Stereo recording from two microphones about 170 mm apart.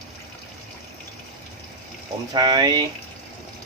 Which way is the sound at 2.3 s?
25° right (ahead or behind).